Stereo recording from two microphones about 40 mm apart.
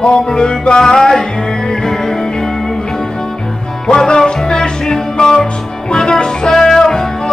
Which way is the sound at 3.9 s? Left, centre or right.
Centre.